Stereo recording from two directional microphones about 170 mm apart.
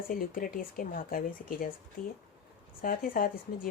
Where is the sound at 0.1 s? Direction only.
55° left (ahead or behind).